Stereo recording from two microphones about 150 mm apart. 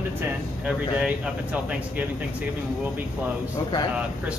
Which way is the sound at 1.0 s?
10° right (ahead or behind).